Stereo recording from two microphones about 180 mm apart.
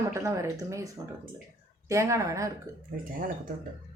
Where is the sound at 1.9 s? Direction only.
15° right (ahead or behind).